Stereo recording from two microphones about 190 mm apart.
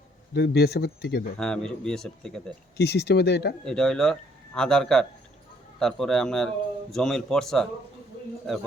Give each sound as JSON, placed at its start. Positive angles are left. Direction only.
{"t": 0.3, "sound": "speech", "side_deg": 60}
{"t": 1.4, "sound": "a man's voice", "side_deg": 5}
{"t": 2.7, "sound": "speech", "side_deg": 60}
{"t": 3.6, "sound": "a man's voice", "side_deg": 5}